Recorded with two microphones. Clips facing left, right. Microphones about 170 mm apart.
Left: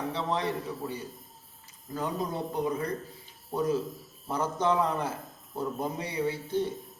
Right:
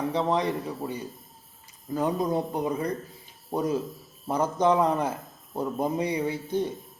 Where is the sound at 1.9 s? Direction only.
15° right (ahead or behind).